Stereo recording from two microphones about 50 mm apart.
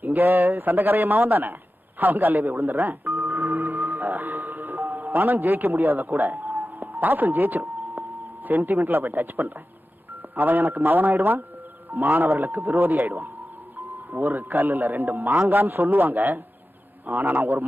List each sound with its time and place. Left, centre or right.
0.0 s a man's voice: right
3.2 s music: right
8.5 s speech: right
12.2 s a man's voice: right